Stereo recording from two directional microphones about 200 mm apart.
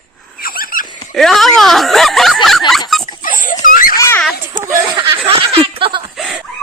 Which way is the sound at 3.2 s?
40° left (ahead or behind).